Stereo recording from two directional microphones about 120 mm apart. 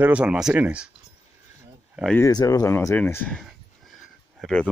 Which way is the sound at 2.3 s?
30° left (ahead or behind).